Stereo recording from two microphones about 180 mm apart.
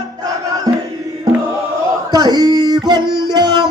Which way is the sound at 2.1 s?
20° right (ahead or behind).